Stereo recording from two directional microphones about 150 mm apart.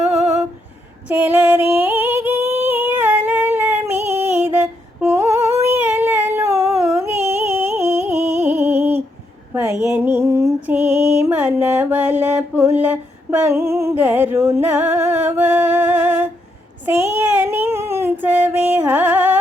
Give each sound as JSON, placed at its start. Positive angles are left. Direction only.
{"t": 1.0, "sound": "singing", "side_deg": -10}
{"t": 6.9, "sound": "music", "side_deg": -15}
{"t": 9.8, "sound": "mantra", "side_deg": -15}
{"t": 12.7, "sound": "a sound", "side_deg": -10}
{"t": 16.8, "sound": "child singing", "side_deg": -15}